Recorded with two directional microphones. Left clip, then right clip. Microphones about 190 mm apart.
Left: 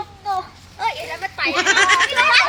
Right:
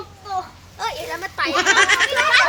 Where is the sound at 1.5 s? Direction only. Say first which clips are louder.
Even; centre (ahead or behind).